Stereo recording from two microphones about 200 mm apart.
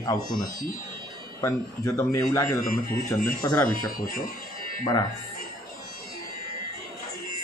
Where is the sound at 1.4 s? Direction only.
15° left (ahead or behind).